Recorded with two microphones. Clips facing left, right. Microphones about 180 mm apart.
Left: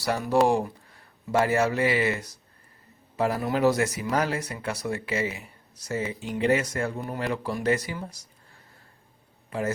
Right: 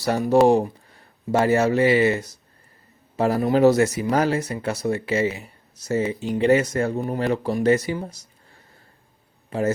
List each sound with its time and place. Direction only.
0.0 s speech: 30° right (ahead or behind)
9.5 s a man's voice: 25° right (ahead or behind)